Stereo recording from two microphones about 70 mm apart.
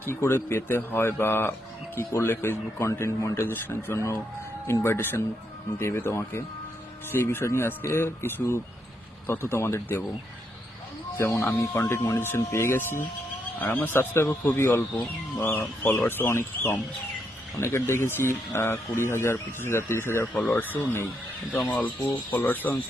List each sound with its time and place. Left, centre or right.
0.0 s speech: left
3.4 s speech: left
3.9 s speech: left
11.2 s speech: left
13.6 s speech: left
14.6 s speech: left
15.0 s speech: left
20.6 s speech: left
22.4 s speech: left